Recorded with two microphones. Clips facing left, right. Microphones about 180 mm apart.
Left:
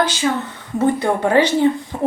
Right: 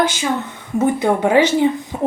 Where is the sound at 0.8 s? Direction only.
10° right (ahead or behind).